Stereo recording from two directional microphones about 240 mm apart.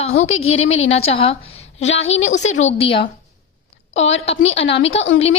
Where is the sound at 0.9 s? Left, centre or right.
Left.